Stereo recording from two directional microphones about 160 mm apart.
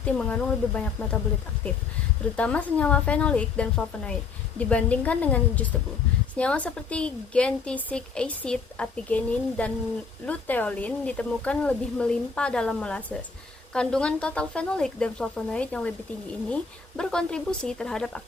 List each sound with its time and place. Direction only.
0.0 s speech: 10° left (ahead or behind)
2.3 s speech: 5° left (ahead or behind)
17.0 s speech: 5° left (ahead or behind)